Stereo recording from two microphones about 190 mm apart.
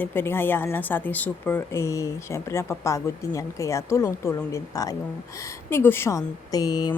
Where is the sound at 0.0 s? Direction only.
10° left (ahead or behind).